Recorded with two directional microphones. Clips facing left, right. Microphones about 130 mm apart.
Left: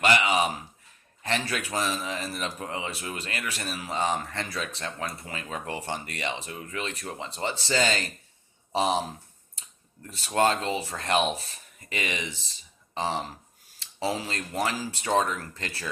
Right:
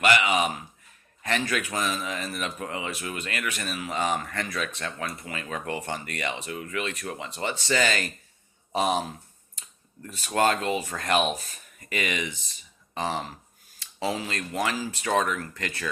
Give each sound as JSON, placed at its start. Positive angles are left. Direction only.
{"t": 0.0, "sound": "speech", "side_deg": 30}
{"t": 10.1, "sound": "speech", "side_deg": 30}